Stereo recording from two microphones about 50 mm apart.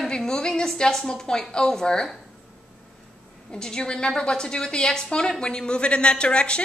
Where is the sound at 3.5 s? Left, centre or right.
Centre.